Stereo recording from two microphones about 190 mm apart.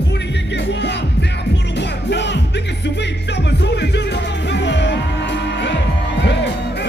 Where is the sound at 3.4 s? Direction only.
65° left (ahead or behind).